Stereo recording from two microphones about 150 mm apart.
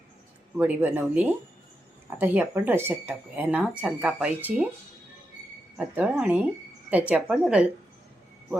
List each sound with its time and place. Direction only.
0.5 s speech: 15° right (ahead or behind)
5.7 s speech: 10° right (ahead or behind)